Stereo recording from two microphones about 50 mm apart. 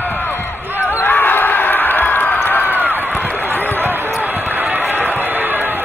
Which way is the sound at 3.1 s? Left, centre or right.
Left.